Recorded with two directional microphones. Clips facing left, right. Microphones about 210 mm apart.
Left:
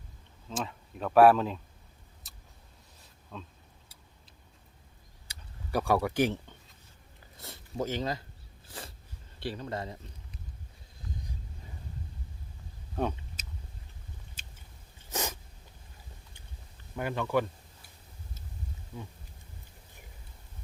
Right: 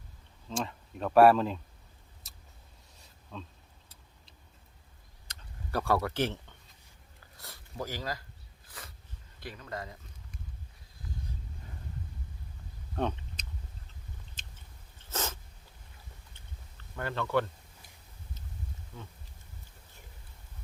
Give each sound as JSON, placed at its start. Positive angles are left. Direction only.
{"t": 0.4, "sound": "speech", "side_deg": 0}
{"t": 2.3, "sound": "vehicle", "side_deg": 0}
{"t": 3.0, "sound": "a sound", "side_deg": 0}
{"t": 5.3, "sound": "a sound", "side_deg": 15}
{"t": 7.3, "sound": "speech", "side_deg": 20}
{"t": 8.6, "sound": "dog", "side_deg": 30}
{"t": 9.4, "sound": "speech", "side_deg": 30}
{"t": 13.0, "sound": "a sound", "side_deg": 5}
{"t": 18.9, "sound": "speech", "side_deg": 10}